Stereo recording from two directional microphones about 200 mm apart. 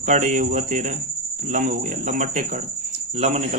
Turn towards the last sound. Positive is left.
turn(degrees=-35)  # may be behind; listen again after turning